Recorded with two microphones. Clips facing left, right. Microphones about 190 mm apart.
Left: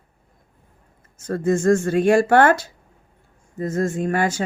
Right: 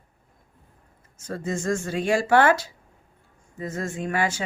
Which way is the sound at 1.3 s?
55° left (ahead or behind).